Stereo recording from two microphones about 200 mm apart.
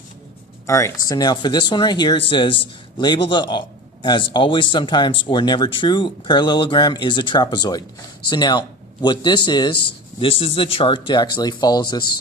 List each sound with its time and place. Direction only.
0.7 s speech: 15° left (ahead or behind)